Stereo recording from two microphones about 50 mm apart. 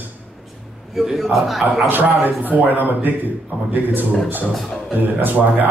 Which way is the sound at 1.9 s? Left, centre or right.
Right.